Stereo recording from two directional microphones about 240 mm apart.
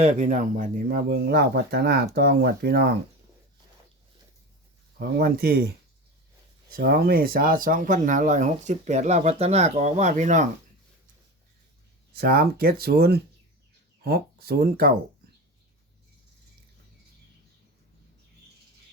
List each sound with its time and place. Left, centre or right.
0.0 s speech: right
4.9 s speech: right
6.7 s speech: right
12.1 s speech: right